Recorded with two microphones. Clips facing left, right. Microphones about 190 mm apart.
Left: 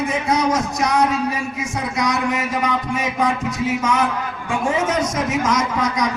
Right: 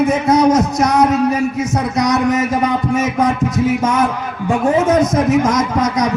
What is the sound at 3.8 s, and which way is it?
Speech, 45° right (ahead or behind).